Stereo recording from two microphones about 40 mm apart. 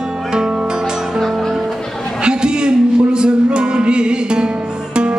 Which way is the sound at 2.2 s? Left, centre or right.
Right.